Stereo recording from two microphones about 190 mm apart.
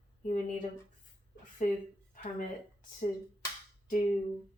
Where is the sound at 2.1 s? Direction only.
45° left (ahead or behind).